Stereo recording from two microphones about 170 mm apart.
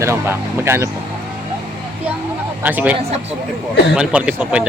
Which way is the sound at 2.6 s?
10° right (ahead or behind).